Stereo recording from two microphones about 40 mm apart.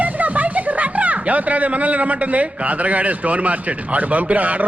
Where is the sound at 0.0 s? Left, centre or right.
Right.